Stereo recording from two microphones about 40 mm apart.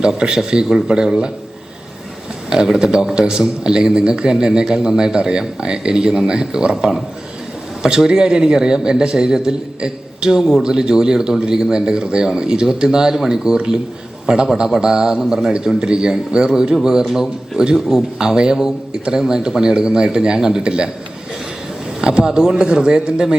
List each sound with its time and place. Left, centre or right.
0.0 s a man's voice: centre
2.5 s a man's voice: centre
7.8 s a man's voice: centre
22.0 s a man's voice: right